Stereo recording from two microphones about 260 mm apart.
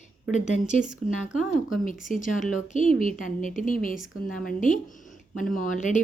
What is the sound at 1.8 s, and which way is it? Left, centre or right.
A woman's voice, left.